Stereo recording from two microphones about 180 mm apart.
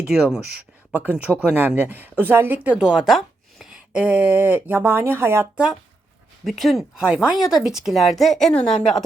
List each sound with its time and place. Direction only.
0.1 s a woman's voice: centre (ahead or behind)
6.4 s speech: centre (ahead or behind)